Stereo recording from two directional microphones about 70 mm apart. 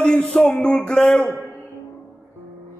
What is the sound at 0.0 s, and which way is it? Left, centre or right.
A man's voice, centre.